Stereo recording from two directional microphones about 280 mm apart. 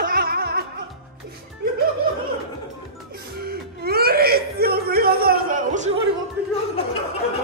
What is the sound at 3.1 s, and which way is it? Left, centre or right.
Whimper, right.